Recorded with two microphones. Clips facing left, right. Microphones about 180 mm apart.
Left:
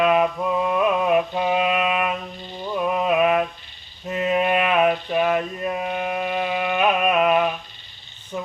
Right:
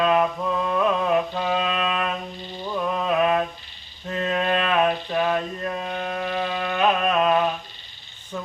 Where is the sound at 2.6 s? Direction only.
15° left (ahead or behind).